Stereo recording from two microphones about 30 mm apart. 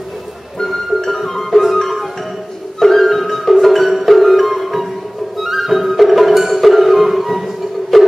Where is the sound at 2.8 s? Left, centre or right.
Centre.